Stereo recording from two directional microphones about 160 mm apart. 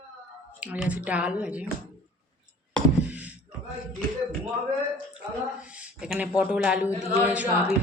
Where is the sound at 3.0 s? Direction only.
10° right (ahead or behind).